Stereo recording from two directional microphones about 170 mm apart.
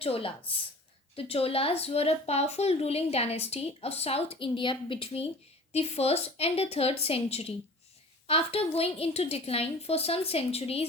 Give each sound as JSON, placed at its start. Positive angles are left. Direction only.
{"t": 0.0, "sound": "speech", "side_deg": 35}